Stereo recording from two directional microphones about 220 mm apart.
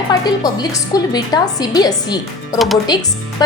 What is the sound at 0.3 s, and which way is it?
A woman's voice, 20° left (ahead or behind).